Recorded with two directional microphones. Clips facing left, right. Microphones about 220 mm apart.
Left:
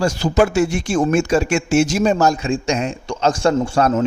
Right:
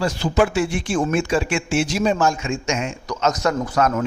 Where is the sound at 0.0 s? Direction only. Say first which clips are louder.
Left 3 dB; 45° left (ahead or behind).